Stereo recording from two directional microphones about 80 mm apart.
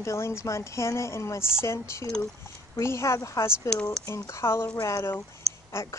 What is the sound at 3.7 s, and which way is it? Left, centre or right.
Speech, centre.